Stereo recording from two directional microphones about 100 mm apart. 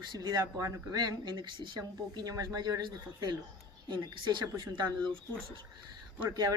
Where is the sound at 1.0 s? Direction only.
45° right (ahead or behind).